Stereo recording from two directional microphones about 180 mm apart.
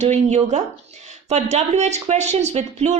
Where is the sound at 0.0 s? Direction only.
40° right (ahead or behind).